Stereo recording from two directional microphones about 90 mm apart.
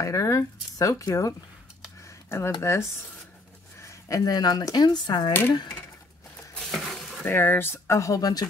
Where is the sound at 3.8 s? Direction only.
40° left (ahead or behind).